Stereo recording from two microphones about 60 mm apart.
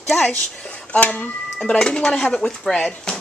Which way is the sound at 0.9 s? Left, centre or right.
Left.